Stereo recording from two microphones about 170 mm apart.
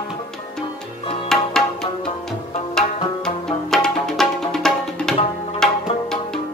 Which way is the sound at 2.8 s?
5° left (ahead or behind).